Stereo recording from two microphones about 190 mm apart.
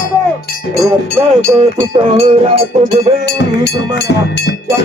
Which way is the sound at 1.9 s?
30° right (ahead or behind).